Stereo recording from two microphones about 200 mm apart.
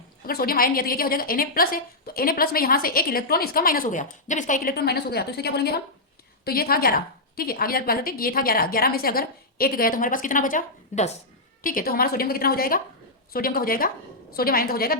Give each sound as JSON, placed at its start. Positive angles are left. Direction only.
{"t": 0.3, "sound": "a woman's voice", "side_deg": 50}